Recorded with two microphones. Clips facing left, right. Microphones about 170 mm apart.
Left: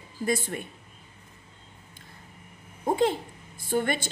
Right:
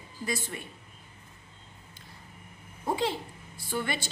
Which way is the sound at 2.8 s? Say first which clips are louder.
Left 5 dB; 50° left (ahead or behind).